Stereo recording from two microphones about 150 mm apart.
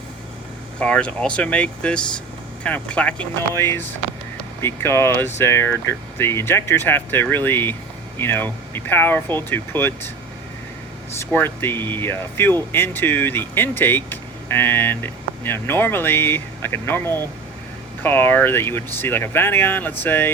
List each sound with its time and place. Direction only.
0.8 s speech: 5° left (ahead or behind)
3.5 s speech: 20° left (ahead or behind)
11.2 s speech: 15° left (ahead or behind)